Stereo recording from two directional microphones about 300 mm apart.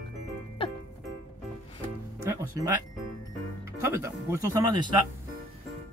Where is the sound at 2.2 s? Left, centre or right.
Centre.